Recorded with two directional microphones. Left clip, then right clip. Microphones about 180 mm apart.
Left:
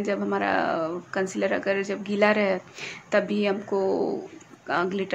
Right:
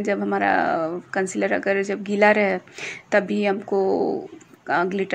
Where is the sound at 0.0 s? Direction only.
20° right (ahead or behind).